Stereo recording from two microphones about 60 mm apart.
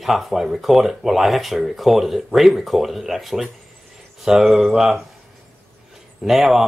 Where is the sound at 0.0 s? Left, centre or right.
Centre.